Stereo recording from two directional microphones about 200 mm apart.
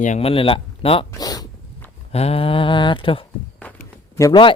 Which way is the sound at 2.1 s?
30° left (ahead or behind).